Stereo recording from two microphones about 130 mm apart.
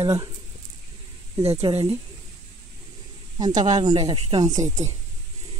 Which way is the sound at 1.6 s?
50° right (ahead or behind).